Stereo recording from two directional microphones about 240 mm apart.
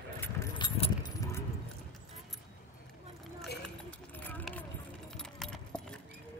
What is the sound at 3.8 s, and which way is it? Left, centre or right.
Clip-clop, centre.